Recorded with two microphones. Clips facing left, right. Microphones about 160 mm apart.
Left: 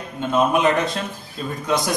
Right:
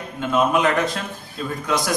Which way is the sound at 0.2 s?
20° left (ahead or behind).